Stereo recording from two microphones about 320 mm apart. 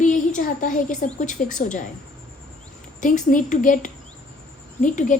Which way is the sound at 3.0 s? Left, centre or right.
Left.